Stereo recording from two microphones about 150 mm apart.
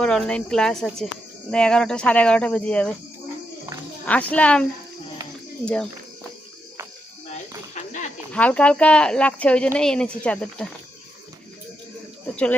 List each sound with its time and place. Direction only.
0.0 s speech: 5° left (ahead or behind)
4.0 s speech: 10° left (ahead or behind)
7.7 s a sound: 55° left (ahead or behind)
8.3 s speech: 10° left (ahead or behind)